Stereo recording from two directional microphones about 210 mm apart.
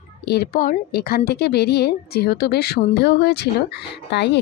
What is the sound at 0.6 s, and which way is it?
A woman's voice, 45° left (ahead or behind).